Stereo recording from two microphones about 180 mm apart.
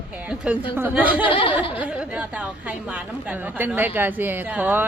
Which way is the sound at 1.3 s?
30° left (ahead or behind).